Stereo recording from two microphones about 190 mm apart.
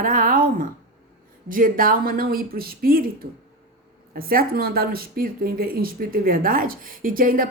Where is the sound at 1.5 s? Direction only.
45° right (ahead or behind).